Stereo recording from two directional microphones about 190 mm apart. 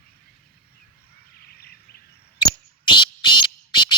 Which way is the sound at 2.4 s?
25° left (ahead or behind).